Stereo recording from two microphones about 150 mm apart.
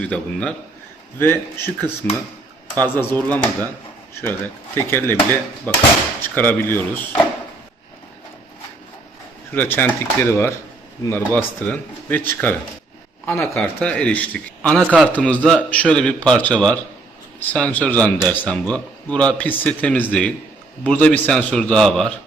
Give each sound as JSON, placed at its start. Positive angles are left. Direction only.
{"t": 0.0, "sound": "a man's voice", "side_deg": 10}
{"t": 2.8, "sound": "a man's voice", "side_deg": 15}
{"t": 9.6, "sound": "a man's voice", "side_deg": 15}
{"t": 13.6, "sound": "a man's voice", "side_deg": 5}